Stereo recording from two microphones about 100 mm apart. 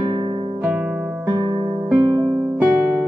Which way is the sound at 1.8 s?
15° right (ahead or behind).